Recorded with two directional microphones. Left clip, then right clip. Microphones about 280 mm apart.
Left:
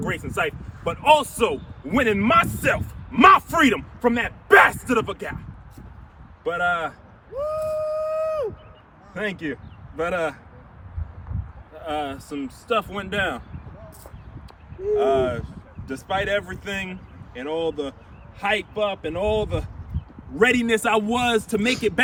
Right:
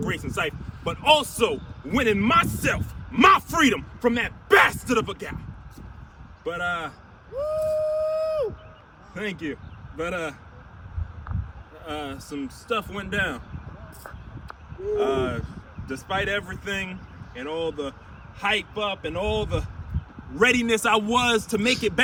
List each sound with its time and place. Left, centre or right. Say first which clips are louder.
0.0 s speech: left 2 dB; centre
6.4 s speech: left 5 dB; centre
7.3 s a sound: right 1 dB; right
9.1 s speech: left 3 dB; centre
11.8 s speech: left 6 dB; centre
14.9 s speech: left 4 dB; centre